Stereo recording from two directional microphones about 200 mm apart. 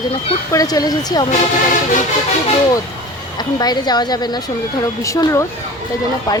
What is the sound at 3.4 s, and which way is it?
Speech, 20° left (ahead or behind).